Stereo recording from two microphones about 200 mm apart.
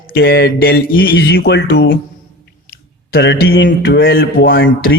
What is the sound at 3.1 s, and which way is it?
A man's voice, 55° left (ahead or behind).